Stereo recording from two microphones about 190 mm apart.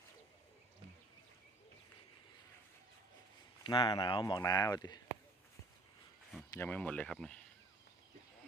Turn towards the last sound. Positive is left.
turn(degrees=5)  # may be behind; listen again after turning